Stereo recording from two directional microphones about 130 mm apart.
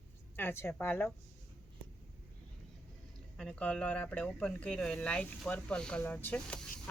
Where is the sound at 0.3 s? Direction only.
15° left (ahead or behind).